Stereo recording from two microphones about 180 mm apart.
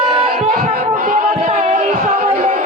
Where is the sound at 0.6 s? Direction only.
50° right (ahead or behind).